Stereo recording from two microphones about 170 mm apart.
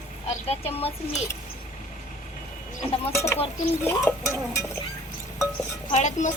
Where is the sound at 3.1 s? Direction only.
15° left (ahead or behind).